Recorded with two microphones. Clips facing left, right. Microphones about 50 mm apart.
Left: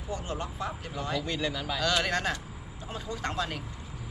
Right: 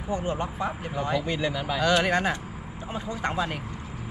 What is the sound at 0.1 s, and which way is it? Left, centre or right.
Speech, right.